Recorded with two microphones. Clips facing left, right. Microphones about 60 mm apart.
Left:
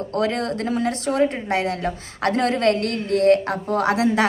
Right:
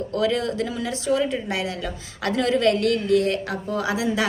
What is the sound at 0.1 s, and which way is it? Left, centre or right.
Speech, left.